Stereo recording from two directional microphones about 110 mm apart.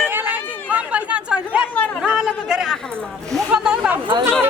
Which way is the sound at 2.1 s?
5° right (ahead or behind).